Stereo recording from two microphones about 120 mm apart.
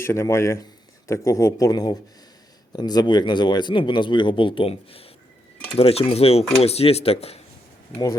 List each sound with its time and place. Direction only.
0.0 s speech: 20° left (ahead or behind); by 5.1 s 55° left (ahead or behind)
5.7 s cutlery: 55° left (ahead or behind)